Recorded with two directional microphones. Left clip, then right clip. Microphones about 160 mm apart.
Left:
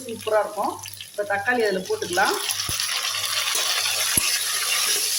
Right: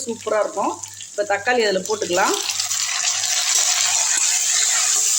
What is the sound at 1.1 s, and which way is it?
Speech, 65° right (ahead or behind).